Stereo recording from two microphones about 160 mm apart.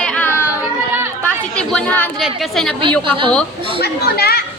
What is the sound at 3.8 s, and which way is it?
Speech, 80° left.